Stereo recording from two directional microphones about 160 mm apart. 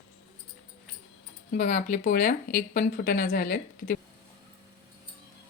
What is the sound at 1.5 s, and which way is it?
Speech, 50° left (ahead or behind).